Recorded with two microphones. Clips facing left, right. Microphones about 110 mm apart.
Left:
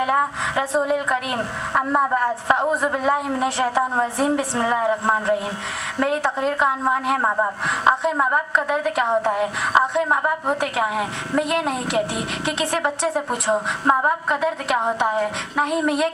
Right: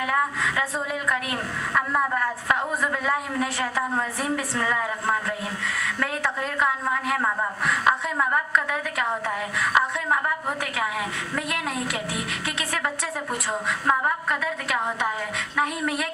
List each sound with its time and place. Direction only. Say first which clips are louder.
0.0 s a woman's voice: left 4 dB; 25° left (ahead or behind)